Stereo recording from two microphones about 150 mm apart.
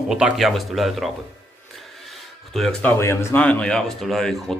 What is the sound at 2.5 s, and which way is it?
Speech, 5° left (ahead or behind).